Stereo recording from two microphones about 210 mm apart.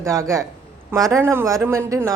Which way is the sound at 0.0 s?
15° right (ahead or behind).